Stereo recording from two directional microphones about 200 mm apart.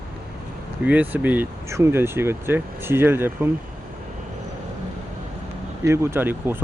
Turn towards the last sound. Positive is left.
turn(degrees=-10)  # may be behind; listen again after turning